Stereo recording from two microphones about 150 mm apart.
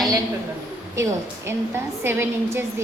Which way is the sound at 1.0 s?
20° right (ahead or behind).